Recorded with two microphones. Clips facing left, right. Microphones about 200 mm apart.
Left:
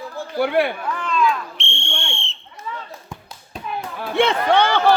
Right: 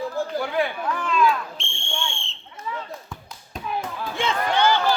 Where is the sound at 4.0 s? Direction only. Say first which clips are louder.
Left 9 dB; 65° left (ahead or behind).